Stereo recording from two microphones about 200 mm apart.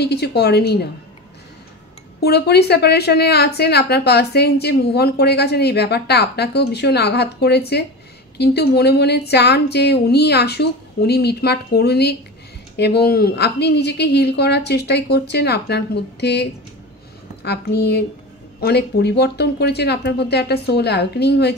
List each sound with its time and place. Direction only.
0.0 s speech: 55° left (ahead or behind)
2.1 s a woman's voice: 55° left (ahead or behind)